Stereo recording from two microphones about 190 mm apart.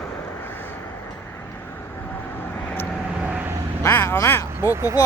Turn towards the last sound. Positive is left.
turn(degrees=-15)  # may be behind; listen again after turning